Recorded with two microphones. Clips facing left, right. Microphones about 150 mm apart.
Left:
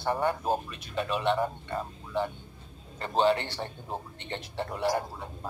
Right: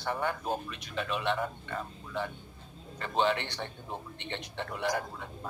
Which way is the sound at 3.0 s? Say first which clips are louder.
Left 4 dB; 35° left (ahead or behind).